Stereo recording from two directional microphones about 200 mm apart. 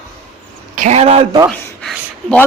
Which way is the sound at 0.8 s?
35° right (ahead or behind).